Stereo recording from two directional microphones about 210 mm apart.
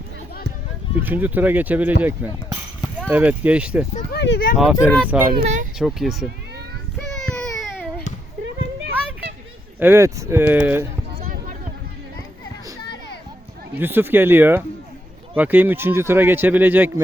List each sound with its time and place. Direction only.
1.0 s speech: 10° right (ahead or behind)
4.1 s speech: 50° left (ahead or behind)
4.5 s speech: 5° right (ahead or behind)
5.4 s speech: 35° right (ahead or behind)
5.8 s speech: centre (ahead or behind)
7.0 s baby cry: centre (ahead or behind)
9.8 s speech: 10° right (ahead or behind)
11.2 s a sound: 35° right (ahead or behind)
13.7 s speech: 10° right (ahead or behind)